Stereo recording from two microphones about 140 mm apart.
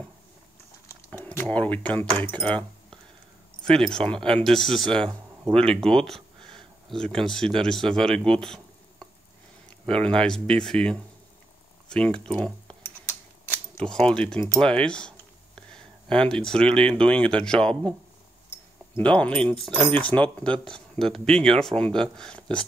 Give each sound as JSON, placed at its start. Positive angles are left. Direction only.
{"t": 0.8, "sound": "a sound", "side_deg": 20}
{"t": 1.5, "sound": "speech", "side_deg": 10}
{"t": 9.8, "sound": "speech", "side_deg": 5}
{"t": 13.8, "sound": "speech", "side_deg": 5}
{"t": 18.9, "sound": "speech", "side_deg": 10}